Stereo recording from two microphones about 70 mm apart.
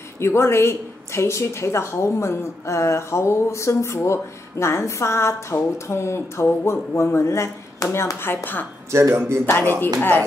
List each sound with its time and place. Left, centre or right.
0.2 s a woman's voice: left
8.9 s speech: right
9.5 s a woman's voice: left